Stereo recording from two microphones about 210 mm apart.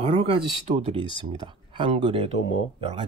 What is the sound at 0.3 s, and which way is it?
Speech, 25° right (ahead or behind).